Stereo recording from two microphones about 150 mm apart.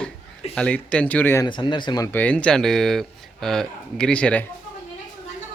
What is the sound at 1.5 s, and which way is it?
Speech, 30° left (ahead or behind).